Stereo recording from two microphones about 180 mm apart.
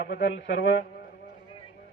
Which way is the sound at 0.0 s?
65° left (ahead or behind).